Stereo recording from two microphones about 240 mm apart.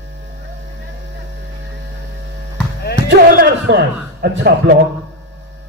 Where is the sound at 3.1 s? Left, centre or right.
Right.